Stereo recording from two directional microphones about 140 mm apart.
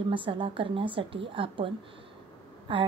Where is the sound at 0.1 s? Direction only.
40° right (ahead or behind).